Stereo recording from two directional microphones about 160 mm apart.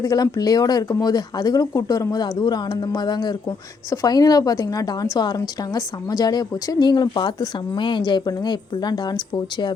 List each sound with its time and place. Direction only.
0.0 s speech: 25° left (ahead or behind)